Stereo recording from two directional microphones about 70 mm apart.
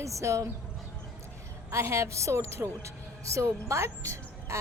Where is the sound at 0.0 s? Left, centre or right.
Right.